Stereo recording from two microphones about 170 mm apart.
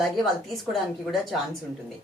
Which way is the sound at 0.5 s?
Centre (ahead or behind).